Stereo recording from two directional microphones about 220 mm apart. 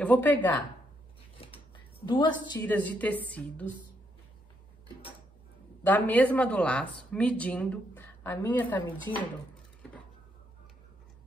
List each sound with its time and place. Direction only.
0.0 s speech: 5° left (ahead or behind)
2.0 s a woman's voice: 20° left (ahead or behind)
2.6 s speech: 10° left (ahead or behind)
5.9 s speech: 10° left (ahead or behind)